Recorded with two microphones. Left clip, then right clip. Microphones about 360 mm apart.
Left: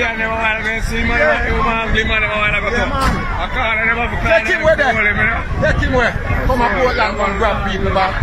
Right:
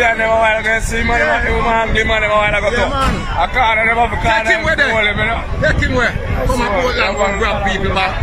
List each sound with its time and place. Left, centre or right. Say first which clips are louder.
0.0 s a sound: right 5 dB; centre
1.7 s speech: right 3 dB; centre
4.3 s a man's voice: left 4 dB; centre